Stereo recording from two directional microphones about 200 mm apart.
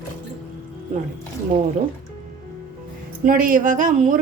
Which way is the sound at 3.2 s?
45° right (ahead or behind).